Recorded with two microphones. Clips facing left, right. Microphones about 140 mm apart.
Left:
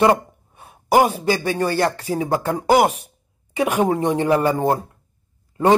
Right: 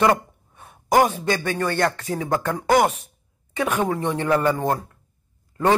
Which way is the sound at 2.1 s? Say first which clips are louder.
Left 3 dB; 15° left (ahead or behind).